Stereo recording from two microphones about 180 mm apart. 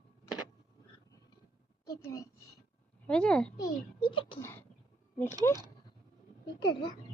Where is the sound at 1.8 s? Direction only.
20° left (ahead or behind).